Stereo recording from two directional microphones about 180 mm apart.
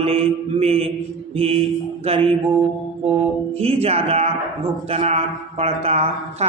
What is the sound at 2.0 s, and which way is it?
Speech, 35° right (ahead or behind).